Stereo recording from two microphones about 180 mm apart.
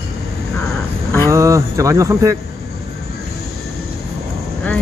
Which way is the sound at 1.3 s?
15° right (ahead or behind).